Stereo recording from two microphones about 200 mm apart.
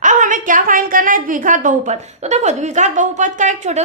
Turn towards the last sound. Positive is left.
turn(degrees=-35)  # may be behind; listen again after turning